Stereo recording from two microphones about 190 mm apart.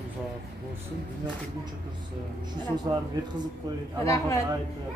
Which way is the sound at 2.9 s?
20° right (ahead or behind).